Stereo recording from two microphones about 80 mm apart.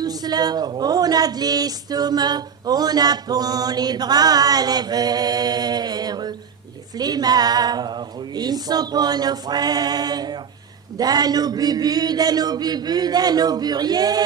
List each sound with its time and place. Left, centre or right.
0.0 s a woman's voice: right